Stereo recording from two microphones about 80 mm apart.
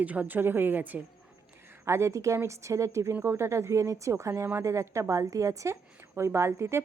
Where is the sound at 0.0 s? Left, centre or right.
Centre.